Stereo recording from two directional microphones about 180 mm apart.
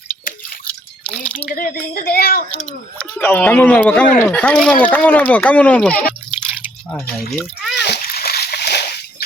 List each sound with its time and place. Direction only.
1.0 s a sound: 5° left (ahead or behind)
1.5 s speech: 50° left (ahead or behind)
3.0 s speech: 10° left (ahead or behind)
7.3 s splash: centre (ahead or behind)
7.8 s splash: 65° left (ahead or behind)